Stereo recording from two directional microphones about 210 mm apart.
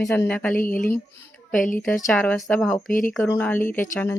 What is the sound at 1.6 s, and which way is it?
Speech, 40° left (ahead or behind).